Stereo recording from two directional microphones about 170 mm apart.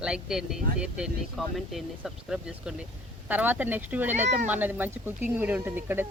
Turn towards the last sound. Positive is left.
turn(degrees=-10)  # may be behind; listen again after turning